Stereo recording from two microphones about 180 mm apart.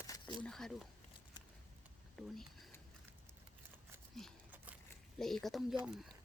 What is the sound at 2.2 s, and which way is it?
Speech, 5° left (ahead or behind).